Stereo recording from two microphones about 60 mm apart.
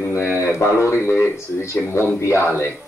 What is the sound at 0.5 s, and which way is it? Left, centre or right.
Speech, left.